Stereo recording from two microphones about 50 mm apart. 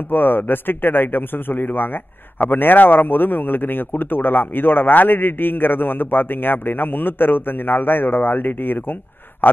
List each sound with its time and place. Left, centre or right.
0.1 s a man's voice: left